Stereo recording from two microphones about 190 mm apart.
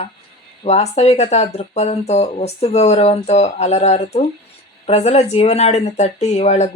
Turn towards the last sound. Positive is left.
turn(degrees=35)  # may be behind; listen again after turning